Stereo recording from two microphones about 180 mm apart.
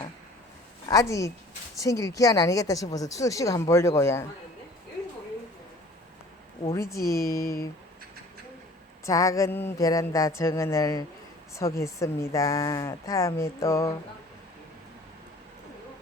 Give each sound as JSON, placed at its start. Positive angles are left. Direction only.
{"t": 0.9, "sound": "a woman's voice", "side_deg": 15}
{"t": 6.7, "sound": "a woman's voice", "side_deg": 15}
{"t": 9.0, "sound": "a woman's voice", "side_deg": 20}